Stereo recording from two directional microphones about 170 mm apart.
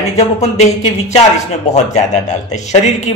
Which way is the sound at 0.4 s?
40° left (ahead or behind).